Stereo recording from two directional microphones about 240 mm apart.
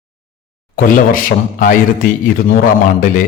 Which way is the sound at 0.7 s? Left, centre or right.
Left.